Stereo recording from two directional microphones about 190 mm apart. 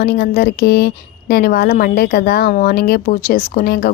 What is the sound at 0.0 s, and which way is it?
A woman's voice, 55° left (ahead or behind).